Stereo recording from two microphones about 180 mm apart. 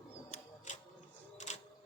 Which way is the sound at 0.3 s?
40° left (ahead or behind).